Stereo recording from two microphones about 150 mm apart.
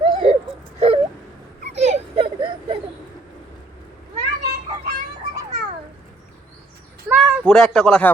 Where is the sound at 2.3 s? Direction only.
35° right (ahead or behind).